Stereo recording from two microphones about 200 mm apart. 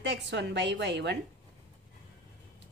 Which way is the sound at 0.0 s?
60° right (ahead or behind).